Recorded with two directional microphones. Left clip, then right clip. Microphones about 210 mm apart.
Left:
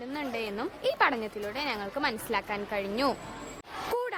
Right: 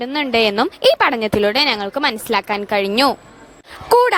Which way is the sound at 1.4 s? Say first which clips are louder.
Right 17 dB; 50° right (ahead or behind).